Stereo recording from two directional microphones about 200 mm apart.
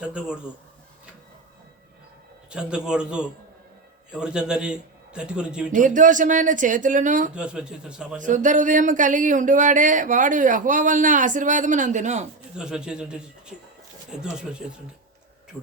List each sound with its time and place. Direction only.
0.0 s a man's voice: 5° right (ahead or behind)
2.5 s a man's voice: 5° right (ahead or behind)
5.7 s speech: 40° right (ahead or behind)
7.3 s a man's voice: 5° right (ahead or behind)
8.2 s speech: 40° right (ahead or behind)
12.5 s a man's voice: 5° right (ahead or behind)